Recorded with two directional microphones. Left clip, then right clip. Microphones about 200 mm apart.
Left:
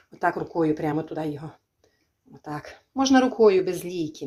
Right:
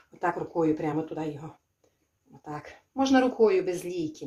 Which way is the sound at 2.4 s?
45° left (ahead or behind).